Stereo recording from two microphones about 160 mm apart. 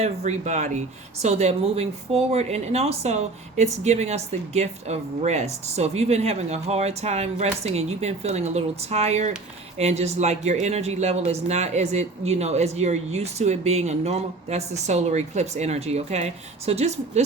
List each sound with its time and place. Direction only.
0.0 s speech: 45° right (ahead or behind)